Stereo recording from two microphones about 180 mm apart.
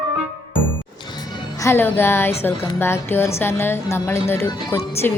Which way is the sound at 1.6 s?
15° left (ahead or behind).